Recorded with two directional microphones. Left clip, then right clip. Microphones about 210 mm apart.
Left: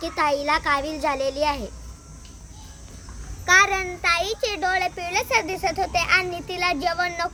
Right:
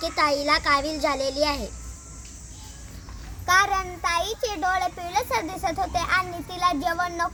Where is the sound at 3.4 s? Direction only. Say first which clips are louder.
Left 3 dB; 10° left (ahead or behind).